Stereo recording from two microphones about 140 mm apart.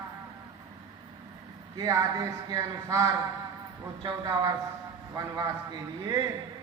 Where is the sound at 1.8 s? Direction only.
25° right (ahead or behind).